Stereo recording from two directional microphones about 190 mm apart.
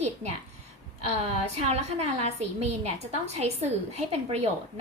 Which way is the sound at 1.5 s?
35° right (ahead or behind).